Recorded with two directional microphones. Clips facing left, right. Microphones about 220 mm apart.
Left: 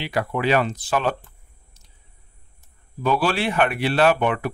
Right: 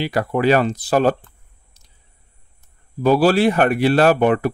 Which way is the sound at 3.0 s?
40° right (ahead or behind).